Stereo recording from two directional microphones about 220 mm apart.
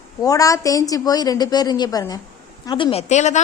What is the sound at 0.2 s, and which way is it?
A woman's voice, 15° left (ahead or behind).